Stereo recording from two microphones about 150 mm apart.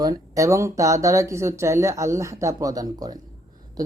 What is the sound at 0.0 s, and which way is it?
Speech, 25° right (ahead or behind).